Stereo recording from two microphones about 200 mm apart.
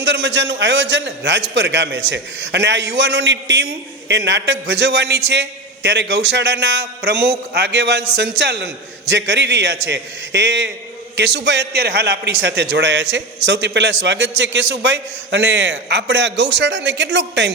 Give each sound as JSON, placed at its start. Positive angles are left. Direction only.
{"t": 0.0, "sound": "a man's voice", "side_deg": -60}